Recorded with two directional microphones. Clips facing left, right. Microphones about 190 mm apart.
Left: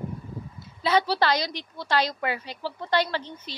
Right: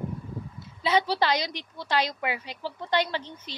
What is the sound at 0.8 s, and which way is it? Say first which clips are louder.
A woman's voice: left 1 dB; 20° right (ahead or behind).